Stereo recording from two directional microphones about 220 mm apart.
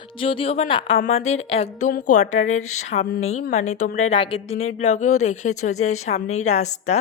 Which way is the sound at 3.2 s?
30° left (ahead or behind).